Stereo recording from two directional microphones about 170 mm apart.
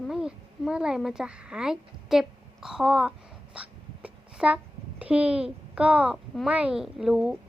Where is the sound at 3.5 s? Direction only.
5° right (ahead or behind).